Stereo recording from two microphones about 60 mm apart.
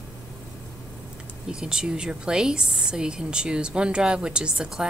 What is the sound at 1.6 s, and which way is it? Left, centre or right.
A woman's voice, centre.